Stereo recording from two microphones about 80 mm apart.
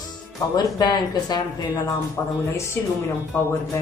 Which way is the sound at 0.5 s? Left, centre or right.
Left.